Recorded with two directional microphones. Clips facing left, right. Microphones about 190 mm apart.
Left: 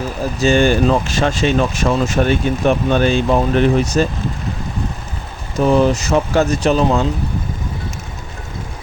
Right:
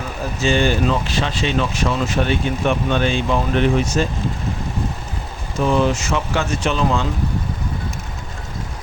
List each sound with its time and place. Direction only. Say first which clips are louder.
0.3 s speech: left 4 dB; 45° left (ahead or behind)
5.5 s speech: left 4 dB; 40° left (ahead or behind)